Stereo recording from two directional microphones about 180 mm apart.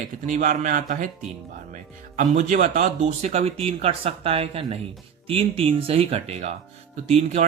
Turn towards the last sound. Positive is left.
turn(degrees=-40)  # may be behind; listen again after turning